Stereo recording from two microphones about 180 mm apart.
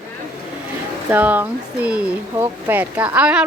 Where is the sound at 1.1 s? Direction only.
10° right (ahead or behind).